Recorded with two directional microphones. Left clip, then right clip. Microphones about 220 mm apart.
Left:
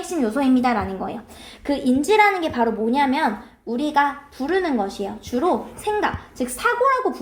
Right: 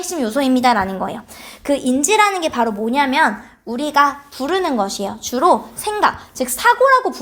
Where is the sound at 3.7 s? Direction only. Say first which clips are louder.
Right 5 dB; 35° right (ahead or behind).